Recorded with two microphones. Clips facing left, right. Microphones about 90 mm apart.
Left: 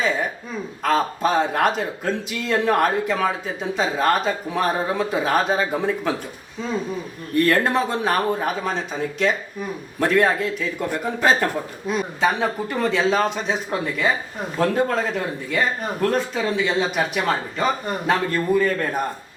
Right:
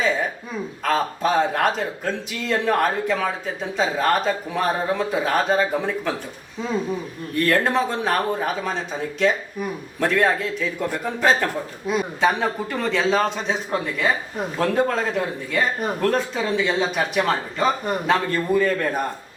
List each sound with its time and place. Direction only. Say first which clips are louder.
0.0 s a sound: even; centre (ahead or behind)
0.9 s speech: left 1 dB; centre (ahead or behind)
7.4 s speech: right 1 dB; centre (ahead or behind)